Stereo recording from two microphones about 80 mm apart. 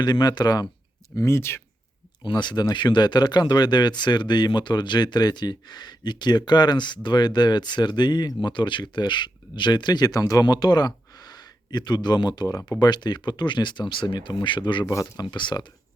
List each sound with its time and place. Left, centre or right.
0.0 s speech: left
1.1 s speech: left
2.2 s speech: left
8.4 s speech: left
14.8 s speech: left
15.3 s speech: left